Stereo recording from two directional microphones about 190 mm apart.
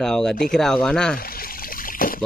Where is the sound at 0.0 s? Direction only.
5° left (ahead or behind).